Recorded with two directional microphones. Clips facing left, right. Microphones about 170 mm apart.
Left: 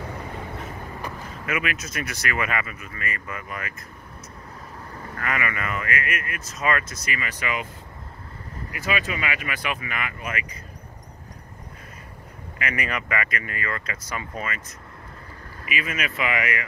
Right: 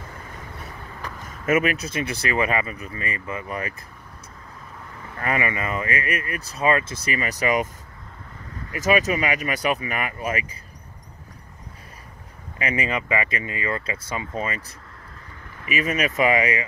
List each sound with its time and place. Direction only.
1.4 s speech: 40° right (ahead or behind)
5.2 s speech: 30° right (ahead or behind)
8.7 s speech: 40° right (ahead or behind)
12.6 s speech: 25° right (ahead or behind)
15.7 s speech: 40° right (ahead or behind)